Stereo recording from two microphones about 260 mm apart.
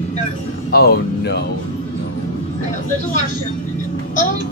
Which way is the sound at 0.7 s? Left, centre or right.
Left.